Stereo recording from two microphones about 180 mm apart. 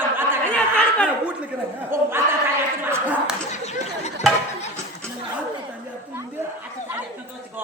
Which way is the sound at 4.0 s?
40° left (ahead or behind).